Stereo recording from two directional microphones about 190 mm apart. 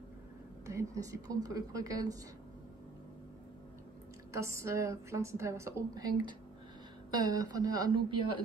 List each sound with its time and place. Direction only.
0.7 s a woman's voice: 15° right (ahead or behind)
4.3 s a woman's voice: 15° right (ahead or behind)